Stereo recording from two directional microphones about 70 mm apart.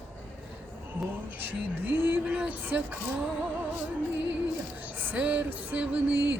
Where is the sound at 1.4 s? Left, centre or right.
Right.